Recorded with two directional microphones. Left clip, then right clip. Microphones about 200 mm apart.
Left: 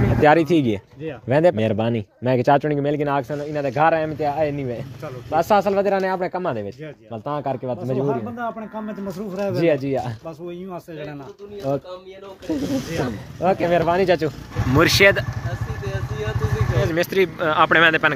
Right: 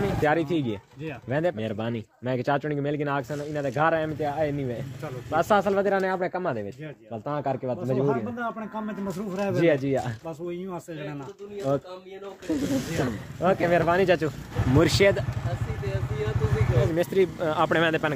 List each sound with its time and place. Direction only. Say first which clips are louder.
0.2 s speech: left 11 dB; 40° left (ahead or behind)
8.0 s a man's voice: left 3 dB; 15° right (ahead or behind)
9.6 s speech: left 3 dB; 15° left (ahead or behind)
11.7 s speech: left 3 dB; 15° left (ahead or behind)
12.4 s speech: left 3 dB; 20° right (ahead or behind)
13.0 s speech: left 4 dB; 25° left (ahead or behind)
14.8 s a man's voice: left 6 dB; 10° right (ahead or behind)
16.8 s a man's voice: left 4 dB; 10° right (ahead or behind)